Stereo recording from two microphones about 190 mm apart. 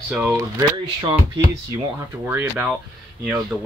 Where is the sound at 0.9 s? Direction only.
20° right (ahead or behind).